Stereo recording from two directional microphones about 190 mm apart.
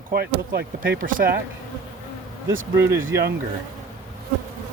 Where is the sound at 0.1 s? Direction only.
55° right (ahead or behind).